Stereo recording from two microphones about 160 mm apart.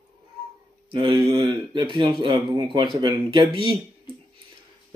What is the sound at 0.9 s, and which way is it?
Speech, 30° right (ahead or behind).